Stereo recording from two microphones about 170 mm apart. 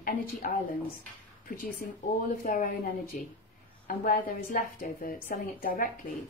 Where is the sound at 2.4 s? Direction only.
55° left (ahead or behind).